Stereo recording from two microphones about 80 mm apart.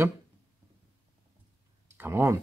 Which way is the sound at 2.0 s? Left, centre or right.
Right.